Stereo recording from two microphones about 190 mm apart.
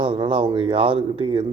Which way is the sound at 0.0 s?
30° right (ahead or behind).